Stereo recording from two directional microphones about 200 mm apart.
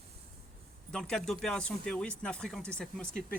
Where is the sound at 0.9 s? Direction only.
5° left (ahead or behind).